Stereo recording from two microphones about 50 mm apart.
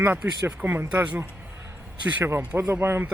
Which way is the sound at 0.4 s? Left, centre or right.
Right.